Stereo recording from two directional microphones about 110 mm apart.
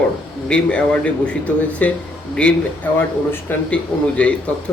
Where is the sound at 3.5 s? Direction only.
15° left (ahead or behind).